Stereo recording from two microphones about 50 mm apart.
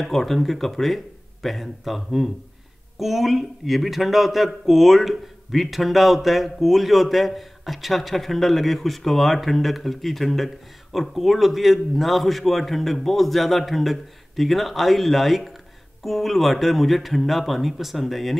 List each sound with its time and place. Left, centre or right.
0.0 s a man's voice: centre